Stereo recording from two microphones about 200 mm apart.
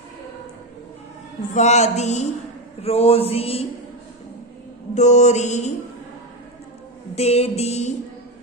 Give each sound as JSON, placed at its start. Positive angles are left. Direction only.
{"t": 1.5, "sound": "speech", "side_deg": 35}
{"t": 2.8, "sound": "a sound", "side_deg": 30}
{"t": 4.9, "sound": "speech", "side_deg": 35}
{"t": 7.2, "sound": "speech", "side_deg": 30}